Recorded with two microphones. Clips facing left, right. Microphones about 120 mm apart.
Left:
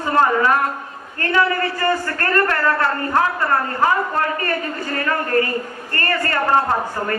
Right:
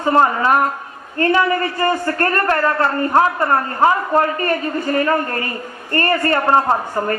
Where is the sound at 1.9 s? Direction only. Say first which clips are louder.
Right 3 dB; 25° right (ahead or behind).